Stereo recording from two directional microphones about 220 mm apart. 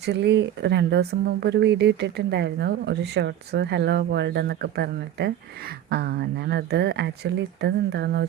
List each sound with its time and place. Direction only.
0.0 s speech: 50° right (ahead or behind)